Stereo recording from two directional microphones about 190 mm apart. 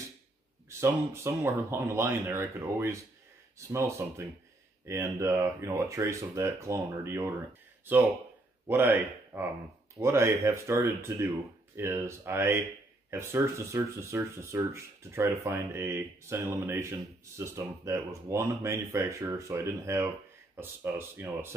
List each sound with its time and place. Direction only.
0.7 s speech: 15° right (ahead or behind)